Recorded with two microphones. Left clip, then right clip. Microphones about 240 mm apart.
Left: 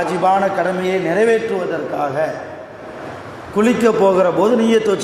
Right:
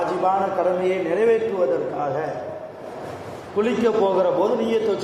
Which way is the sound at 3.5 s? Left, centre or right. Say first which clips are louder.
Left 5 dB; left.